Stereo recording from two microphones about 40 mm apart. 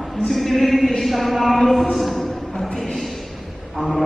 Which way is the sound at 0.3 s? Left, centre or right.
Centre.